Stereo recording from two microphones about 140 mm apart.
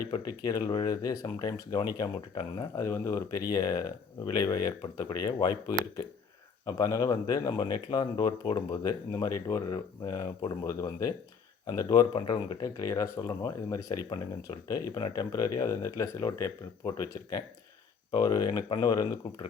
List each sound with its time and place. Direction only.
0.0 s speech: 25° left (ahead or behind)